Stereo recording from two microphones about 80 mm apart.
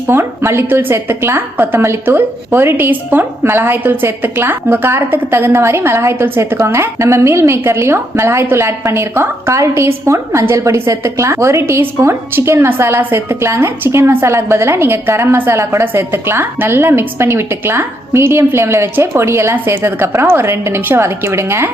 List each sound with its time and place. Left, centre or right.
0.1 s a woman's voice: right